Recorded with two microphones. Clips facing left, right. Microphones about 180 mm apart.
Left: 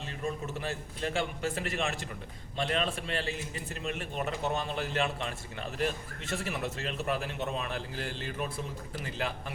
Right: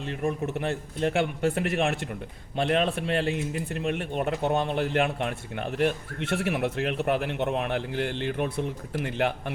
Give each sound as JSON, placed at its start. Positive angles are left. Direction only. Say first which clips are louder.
{"t": 0.2, "sound": "speech", "louder": "right 6 dB", "side_deg": -60}